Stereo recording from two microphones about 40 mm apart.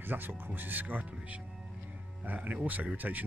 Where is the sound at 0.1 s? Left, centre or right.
Right.